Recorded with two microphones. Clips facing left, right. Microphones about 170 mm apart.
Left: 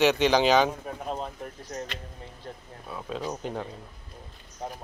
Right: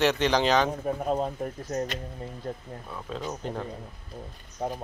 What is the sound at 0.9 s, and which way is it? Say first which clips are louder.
Speech: right 6 dB; 40° right (ahead or behind).